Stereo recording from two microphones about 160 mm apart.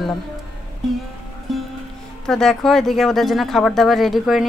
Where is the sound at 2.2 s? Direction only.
5° left (ahead or behind).